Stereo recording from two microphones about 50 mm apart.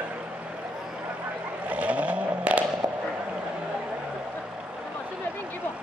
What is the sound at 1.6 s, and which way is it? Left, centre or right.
Vehicle, right.